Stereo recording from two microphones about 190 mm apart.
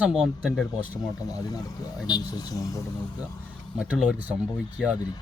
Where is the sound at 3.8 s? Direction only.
5° right (ahead or behind).